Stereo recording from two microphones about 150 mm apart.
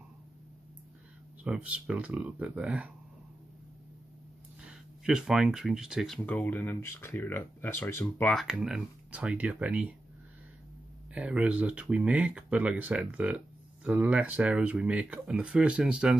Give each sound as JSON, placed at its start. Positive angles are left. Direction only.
{"t": 1.4, "sound": "speech", "side_deg": -10}
{"t": 5.0, "sound": "speech", "side_deg": -5}
{"t": 6.2, "sound": "speech", "side_deg": 10}
{"t": 8.5, "sound": "speech", "side_deg": -5}
{"t": 11.1, "sound": "speech", "side_deg": -10}